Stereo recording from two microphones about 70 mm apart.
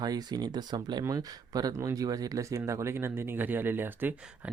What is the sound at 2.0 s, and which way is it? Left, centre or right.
Speech, right.